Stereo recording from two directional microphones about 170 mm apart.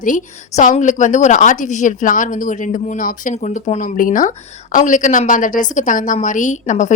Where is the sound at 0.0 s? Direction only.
50° left (ahead or behind).